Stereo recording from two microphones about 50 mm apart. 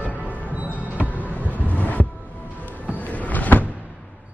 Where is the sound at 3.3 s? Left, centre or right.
Left.